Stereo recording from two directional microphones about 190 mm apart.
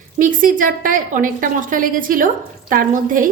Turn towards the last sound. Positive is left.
turn(degrees=-45)  # may be behind; listen again after turning